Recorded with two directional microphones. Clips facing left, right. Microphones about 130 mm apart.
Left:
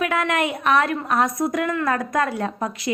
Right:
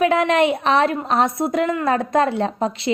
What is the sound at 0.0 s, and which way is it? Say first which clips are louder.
A woman's voice: right 6 dB; 25° right (ahead or behind).